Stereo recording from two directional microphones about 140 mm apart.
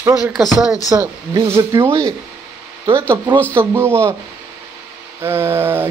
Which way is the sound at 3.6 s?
15° right (ahead or behind).